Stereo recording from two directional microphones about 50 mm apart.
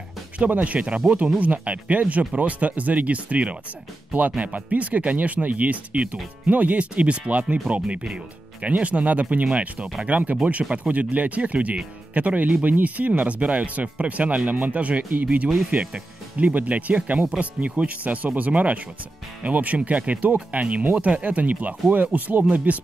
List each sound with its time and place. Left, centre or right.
0.5 s speech: right